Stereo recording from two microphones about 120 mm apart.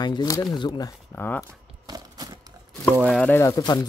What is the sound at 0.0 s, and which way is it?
Speech, 35° left (ahead or behind).